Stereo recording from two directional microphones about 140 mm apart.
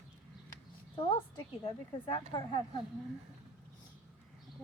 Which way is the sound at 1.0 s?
35° left (ahead or behind).